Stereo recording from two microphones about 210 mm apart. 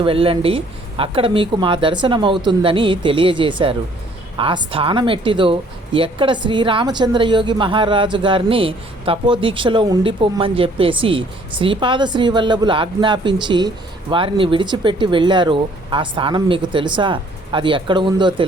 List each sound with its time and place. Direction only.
0.0 s speech: 25° right (ahead or behind)